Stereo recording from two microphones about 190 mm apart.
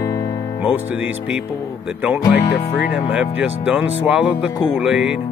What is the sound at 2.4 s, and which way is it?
Speech, 65° left (ahead or behind).